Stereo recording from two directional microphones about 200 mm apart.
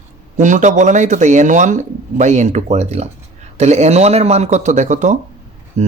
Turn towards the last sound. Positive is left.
turn(degrees=-35)  # may be behind; listen again after turning